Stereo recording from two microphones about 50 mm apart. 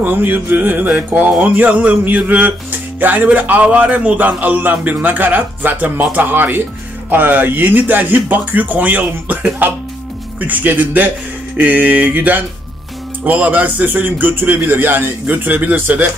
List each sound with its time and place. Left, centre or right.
0.0 s music: right